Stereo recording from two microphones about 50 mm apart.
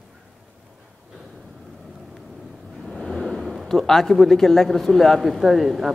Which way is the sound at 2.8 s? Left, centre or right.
Centre.